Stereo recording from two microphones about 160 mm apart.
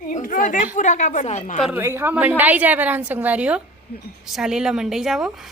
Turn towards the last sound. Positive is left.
turn(degrees=-5)  # may be behind; listen again after turning